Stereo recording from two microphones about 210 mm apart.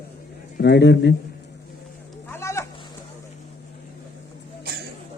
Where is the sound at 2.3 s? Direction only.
15° left (ahead or behind).